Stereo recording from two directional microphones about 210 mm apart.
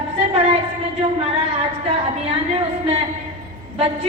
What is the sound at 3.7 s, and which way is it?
Speech, 30° right (ahead or behind).